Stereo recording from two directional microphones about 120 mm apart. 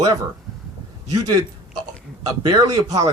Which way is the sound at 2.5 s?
30° right (ahead or behind).